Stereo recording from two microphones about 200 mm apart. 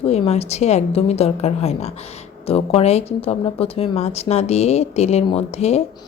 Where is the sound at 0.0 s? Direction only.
30° left (ahead or behind).